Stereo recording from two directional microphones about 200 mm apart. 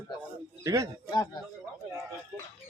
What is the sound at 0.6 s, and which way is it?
Speech, 15° right (ahead or behind).